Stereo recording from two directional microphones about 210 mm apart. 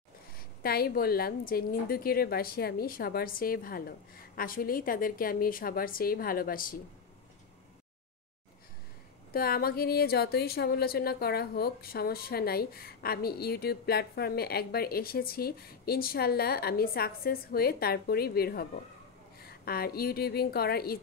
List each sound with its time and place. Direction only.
0.6 s speech: 45° left (ahead or behind)
9.3 s speech: 45° left (ahead or behind)